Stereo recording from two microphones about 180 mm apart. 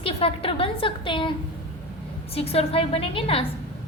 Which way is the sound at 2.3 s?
35° left (ahead or behind).